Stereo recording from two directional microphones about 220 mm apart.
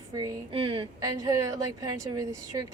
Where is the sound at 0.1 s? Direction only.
15° right (ahead or behind).